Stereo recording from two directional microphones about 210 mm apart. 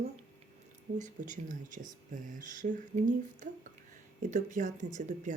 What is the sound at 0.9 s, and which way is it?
Speech, 35° right (ahead or behind).